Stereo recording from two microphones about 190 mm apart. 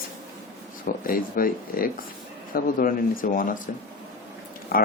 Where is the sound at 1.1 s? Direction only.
50° left (ahead or behind).